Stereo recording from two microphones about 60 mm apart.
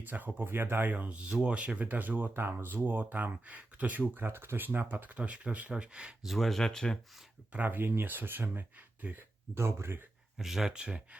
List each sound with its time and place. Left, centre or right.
0.0 s speech: right
4.1 s speech: right; by 6.1 s centre
6.2 s speech: centre
7.5 s speech: right
9.6 s speech: right
10.3 s speech: centre